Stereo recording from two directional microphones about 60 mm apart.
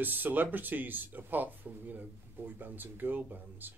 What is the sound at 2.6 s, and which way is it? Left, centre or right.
Speech, right.